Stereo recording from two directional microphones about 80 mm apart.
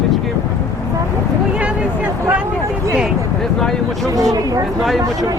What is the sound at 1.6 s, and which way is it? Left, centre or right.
Speech, centre.